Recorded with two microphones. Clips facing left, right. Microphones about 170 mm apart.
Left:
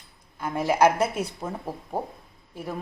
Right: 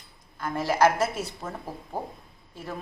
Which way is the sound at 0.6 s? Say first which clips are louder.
Left 2 dB; 15° left (ahead or behind).